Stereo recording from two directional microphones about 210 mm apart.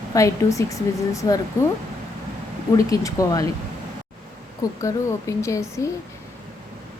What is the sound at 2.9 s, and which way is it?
Speech, 15° left (ahead or behind).